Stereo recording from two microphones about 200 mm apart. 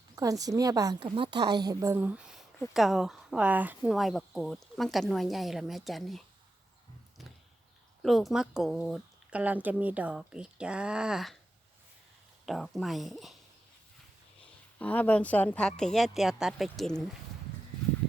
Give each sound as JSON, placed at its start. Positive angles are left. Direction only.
{"t": 0.2, "sound": "a woman's voice", "side_deg": -15}
{"t": 8.0, "sound": "speech", "side_deg": 0}
{"t": 12.5, "sound": "speech", "side_deg": 0}
{"t": 14.8, "sound": "speech", "side_deg": 5}